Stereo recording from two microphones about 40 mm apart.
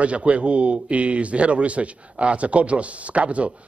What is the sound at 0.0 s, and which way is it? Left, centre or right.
Speech, right.